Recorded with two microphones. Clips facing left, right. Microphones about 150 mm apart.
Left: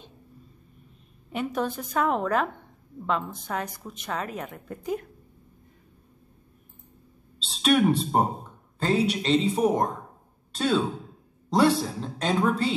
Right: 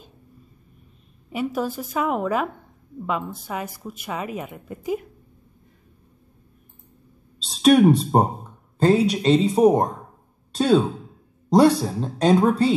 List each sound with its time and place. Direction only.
1.3 s a woman's voice: 5° right (ahead or behind)
7.4 s a woman's voice: 40° right (ahead or behind)
11.5 s a woman's voice: 40° right (ahead or behind)